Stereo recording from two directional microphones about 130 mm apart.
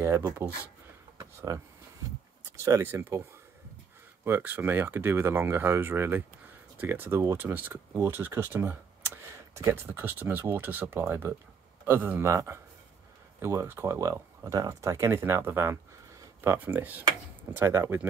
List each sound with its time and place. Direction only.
0.0 s speech: 20° right (ahead or behind)